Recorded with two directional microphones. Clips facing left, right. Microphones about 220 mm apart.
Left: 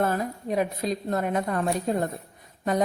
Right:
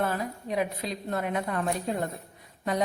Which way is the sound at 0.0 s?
45° left (ahead or behind).